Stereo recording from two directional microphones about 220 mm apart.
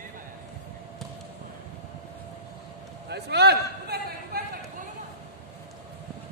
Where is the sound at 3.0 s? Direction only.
50° right (ahead or behind).